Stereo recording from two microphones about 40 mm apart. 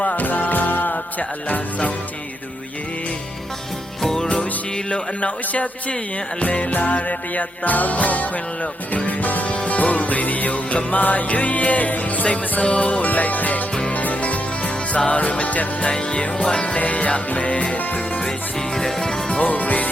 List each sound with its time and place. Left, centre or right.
0.2 s music: left
1.5 s speech: left
4.0 s music: centre
4.9 s a man's voice: left
6.4 s music: left
15.9 s music: left
18.2 s music: left
19.3 s music: left